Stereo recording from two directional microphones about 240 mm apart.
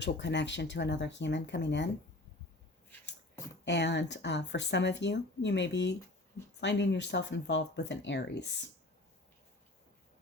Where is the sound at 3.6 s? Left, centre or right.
Left.